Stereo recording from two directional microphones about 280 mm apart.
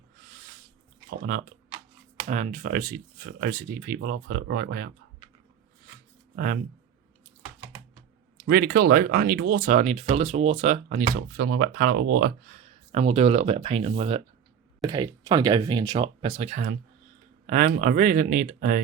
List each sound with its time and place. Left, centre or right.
1.2 s speech: right
6.3 s speech: right
8.4 s speech: right
12.9 s speech: right